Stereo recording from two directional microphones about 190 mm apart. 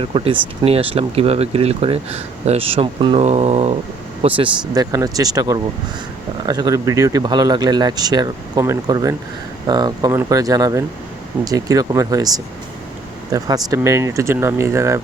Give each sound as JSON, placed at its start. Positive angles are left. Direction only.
{"t": 0.0, "sound": "speech", "side_deg": -25}
{"t": 4.7, "sound": "speech", "side_deg": -20}